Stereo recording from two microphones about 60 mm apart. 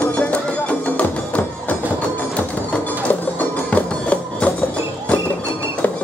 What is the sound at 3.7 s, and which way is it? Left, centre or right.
Music, left.